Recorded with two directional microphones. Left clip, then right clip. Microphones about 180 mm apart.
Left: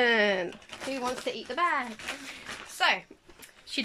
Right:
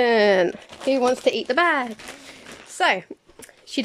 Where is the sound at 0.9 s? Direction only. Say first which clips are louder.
Right 13 dB; 60° right (ahead or behind).